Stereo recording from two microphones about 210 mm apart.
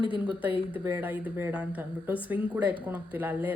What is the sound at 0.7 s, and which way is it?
Speech, 10° right (ahead or behind).